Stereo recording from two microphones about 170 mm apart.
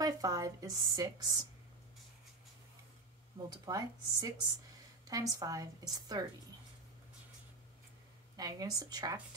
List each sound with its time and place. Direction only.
0.0 s speech: 20° right (ahead or behind)
3.6 s speech: 20° right (ahead or behind)
8.4 s speech: 20° right (ahead or behind)